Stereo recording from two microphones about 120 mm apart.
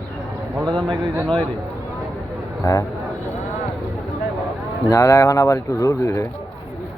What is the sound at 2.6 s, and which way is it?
Speech, 25° left (ahead or behind).